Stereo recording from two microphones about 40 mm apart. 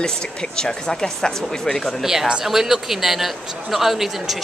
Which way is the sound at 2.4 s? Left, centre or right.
Centre.